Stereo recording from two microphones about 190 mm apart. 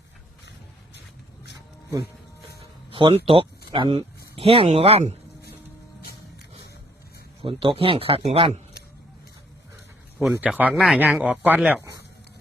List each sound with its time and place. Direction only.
2.9 s speech: 25° right (ahead or behind)
7.4 s speech: 30° right (ahead or behind)
10.2 s speech: 5° right (ahead or behind)